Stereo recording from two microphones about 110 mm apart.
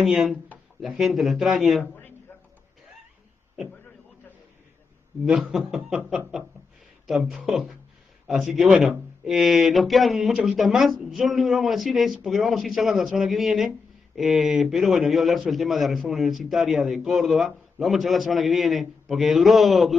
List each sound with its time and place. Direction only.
0.0 s a man's voice: centre (ahead or behind)
5.2 s a man's voice: 5° right (ahead or behind)